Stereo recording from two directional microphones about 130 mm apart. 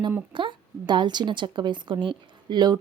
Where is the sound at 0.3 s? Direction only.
40° right (ahead or behind).